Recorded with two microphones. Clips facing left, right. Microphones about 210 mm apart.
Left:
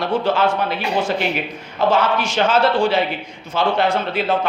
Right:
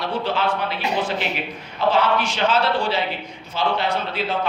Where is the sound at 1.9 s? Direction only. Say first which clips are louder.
Left 2 dB; 45° left (ahead or behind).